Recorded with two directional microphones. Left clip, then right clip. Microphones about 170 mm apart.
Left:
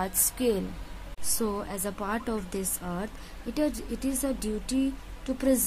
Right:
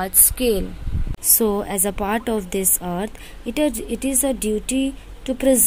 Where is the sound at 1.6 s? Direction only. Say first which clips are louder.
Right 10 dB; 25° right (ahead or behind).